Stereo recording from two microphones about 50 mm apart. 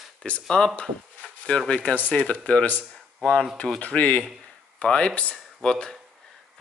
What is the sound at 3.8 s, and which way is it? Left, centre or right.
Speech, left.